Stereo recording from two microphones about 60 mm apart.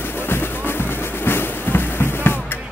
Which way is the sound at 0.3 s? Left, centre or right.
Left.